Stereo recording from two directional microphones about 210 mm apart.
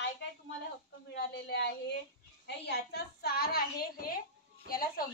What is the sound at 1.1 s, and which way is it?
A woman's voice, 50° left (ahead or behind).